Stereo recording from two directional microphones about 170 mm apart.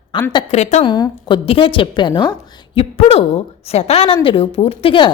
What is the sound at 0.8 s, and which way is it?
A woman's voice, 25° left (ahead or behind).